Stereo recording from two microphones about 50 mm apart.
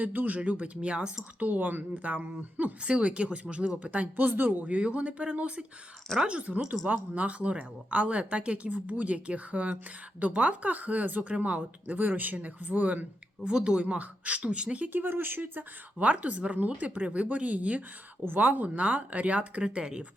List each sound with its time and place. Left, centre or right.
0.0 s speech: right; by 1.2 s centre
1.4 s speech: right
4.3 s speech: right
4.6 s speech: right
13.4 s speech: centre
13.8 s speech: right
14.9 s speech: right
16.0 s speech: right